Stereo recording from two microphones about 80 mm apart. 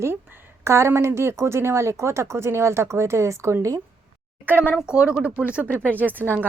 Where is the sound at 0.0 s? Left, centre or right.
Right.